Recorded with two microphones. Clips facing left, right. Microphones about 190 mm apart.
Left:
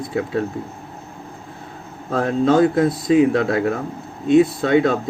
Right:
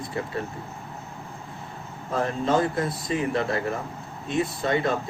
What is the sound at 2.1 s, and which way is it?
Speech, 90° left.